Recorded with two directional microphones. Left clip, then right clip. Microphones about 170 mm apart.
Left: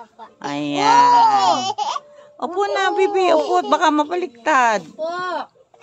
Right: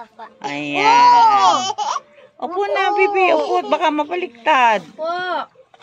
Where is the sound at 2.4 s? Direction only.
25° left (ahead or behind).